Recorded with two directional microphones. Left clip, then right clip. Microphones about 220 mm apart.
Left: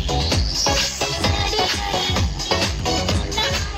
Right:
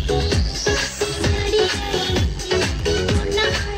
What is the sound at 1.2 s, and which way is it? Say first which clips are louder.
Music: right 2 dB; 25° right (ahead or behind).